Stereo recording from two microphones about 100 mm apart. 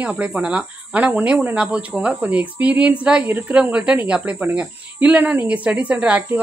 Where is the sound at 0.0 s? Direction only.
15° right (ahead or behind).